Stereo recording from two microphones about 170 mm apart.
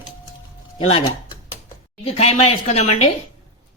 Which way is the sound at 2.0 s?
35° left (ahead or behind).